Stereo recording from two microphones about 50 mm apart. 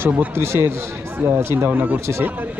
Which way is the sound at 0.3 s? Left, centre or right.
Right.